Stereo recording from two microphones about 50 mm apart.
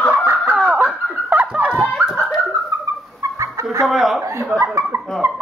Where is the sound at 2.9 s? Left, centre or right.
Right.